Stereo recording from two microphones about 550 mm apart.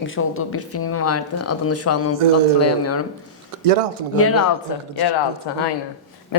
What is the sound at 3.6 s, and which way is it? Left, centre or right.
Speech, right.